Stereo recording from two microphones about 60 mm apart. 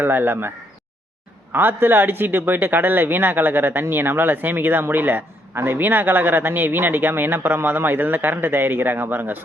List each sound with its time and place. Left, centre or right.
0.0 s speech: right
1.5 s speech: right